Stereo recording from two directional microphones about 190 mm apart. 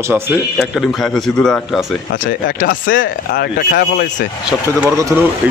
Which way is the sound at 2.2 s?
45° left (ahead or behind).